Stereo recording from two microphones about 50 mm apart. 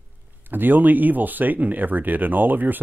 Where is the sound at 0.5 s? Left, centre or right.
Right.